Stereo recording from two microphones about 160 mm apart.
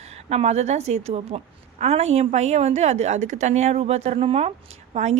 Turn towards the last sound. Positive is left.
turn(degrees=-45)  # may be behind; listen again after turning